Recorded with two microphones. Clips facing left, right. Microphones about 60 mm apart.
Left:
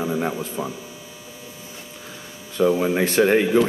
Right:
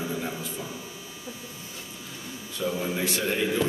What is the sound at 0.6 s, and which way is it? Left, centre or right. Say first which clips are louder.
Speech: left 9 dB; left.